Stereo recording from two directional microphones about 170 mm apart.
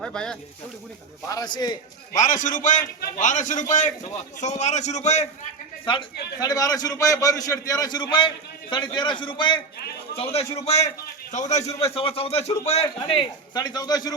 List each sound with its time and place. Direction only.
0.0 s speech: 5° left (ahead or behind)
1.3 s a man's voice: 20° left (ahead or behind)
2.1 s a man's voice: 50° left (ahead or behind)
5.8 s a man's voice: 30° left (ahead or behind)
10.3 s a man's voice: 40° left (ahead or behind); by 14.1 s 20° left (ahead or behind)